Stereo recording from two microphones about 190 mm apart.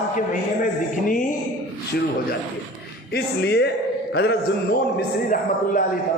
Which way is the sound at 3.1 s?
60° left (ahead or behind).